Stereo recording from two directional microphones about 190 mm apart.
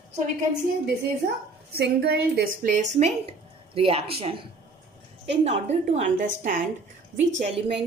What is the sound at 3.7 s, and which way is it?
A woman's voice, 30° right (ahead or behind).